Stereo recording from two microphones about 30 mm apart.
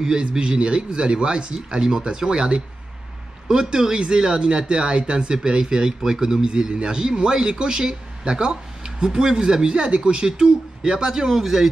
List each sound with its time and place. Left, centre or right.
0.4 s speech: right; by 11.7 s centre